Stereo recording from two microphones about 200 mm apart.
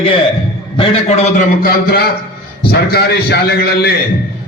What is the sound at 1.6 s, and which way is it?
A man's voice, 50° left (ahead or behind).